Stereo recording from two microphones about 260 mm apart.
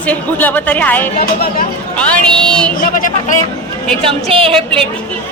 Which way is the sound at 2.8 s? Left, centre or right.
Left.